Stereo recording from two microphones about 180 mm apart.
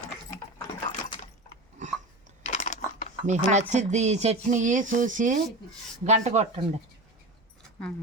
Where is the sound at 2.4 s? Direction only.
40° left (ahead or behind).